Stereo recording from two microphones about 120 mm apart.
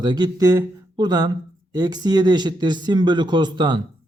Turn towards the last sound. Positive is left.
turn(degrees=-40)  # may be behind; listen again after turning